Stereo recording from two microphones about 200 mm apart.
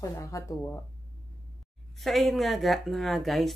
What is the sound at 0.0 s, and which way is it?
Speech, 15° left (ahead or behind).